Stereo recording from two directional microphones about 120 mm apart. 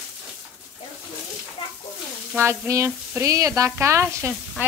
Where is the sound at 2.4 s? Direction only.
25° right (ahead or behind).